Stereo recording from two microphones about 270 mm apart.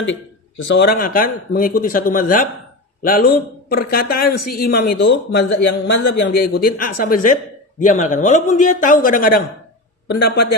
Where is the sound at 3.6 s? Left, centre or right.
Left.